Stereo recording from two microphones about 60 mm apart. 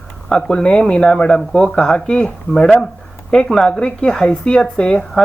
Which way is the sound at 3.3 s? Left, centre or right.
Centre.